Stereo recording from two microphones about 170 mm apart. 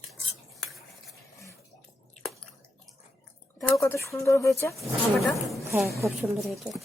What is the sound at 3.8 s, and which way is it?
Speech, 15° left (ahead or behind).